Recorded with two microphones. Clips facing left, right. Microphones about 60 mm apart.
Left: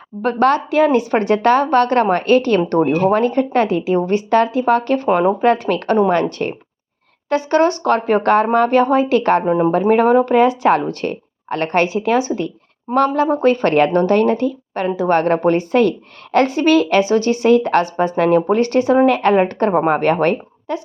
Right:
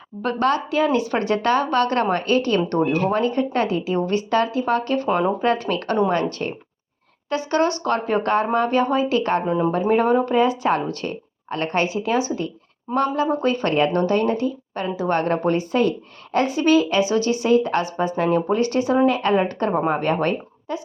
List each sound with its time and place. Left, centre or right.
0.2 s a woman's voice: left